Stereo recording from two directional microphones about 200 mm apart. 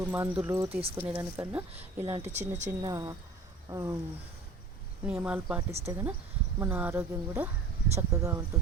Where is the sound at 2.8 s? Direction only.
20° right (ahead or behind).